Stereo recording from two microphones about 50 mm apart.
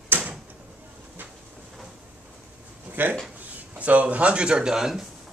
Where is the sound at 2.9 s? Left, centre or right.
Right.